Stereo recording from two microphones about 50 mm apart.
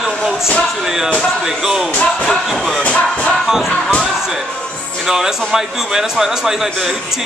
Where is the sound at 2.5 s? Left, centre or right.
Centre.